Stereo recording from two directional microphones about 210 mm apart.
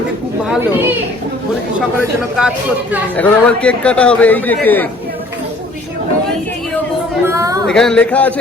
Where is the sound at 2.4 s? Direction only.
5° right (ahead or behind).